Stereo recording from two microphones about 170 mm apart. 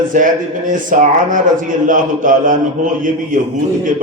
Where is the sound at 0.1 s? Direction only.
55° right (ahead or behind).